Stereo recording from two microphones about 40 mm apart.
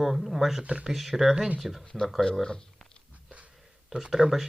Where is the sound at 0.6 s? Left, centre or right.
Right.